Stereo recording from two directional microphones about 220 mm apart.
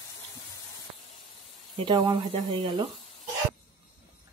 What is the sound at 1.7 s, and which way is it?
Speech, 20° right (ahead or behind).